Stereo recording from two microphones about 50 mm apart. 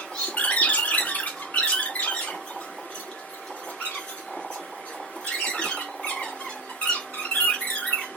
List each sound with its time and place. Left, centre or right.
0.3 s squeak: left
5.2 s a sound: centre
6.9 s squeak: left